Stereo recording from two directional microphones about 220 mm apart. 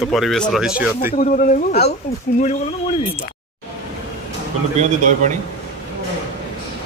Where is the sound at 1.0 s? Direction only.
35° left (ahead or behind).